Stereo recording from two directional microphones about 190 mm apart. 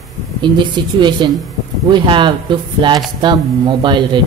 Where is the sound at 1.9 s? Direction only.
25° right (ahead or behind).